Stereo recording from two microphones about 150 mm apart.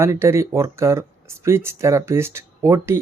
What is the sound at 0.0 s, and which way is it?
Speech, 15° right (ahead or behind).